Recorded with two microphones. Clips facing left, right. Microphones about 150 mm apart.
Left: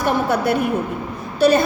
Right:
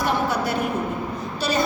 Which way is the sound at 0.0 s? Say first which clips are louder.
Left 4 dB; 60° left (ahead or behind).